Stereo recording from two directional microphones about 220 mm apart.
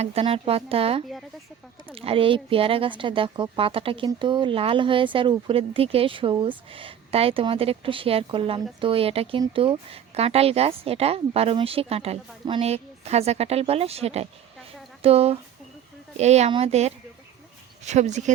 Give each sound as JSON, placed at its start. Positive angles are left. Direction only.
{"t": 0.0, "sound": "speech", "side_deg": -25}